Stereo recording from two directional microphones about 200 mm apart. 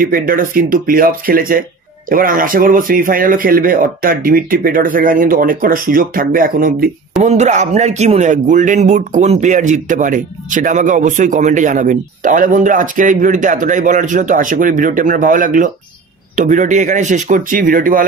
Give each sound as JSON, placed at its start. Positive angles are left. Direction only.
{"t": 0.3, "sound": "speech", "side_deg": -45}
{"t": 7.2, "sound": "speech", "side_deg": -35}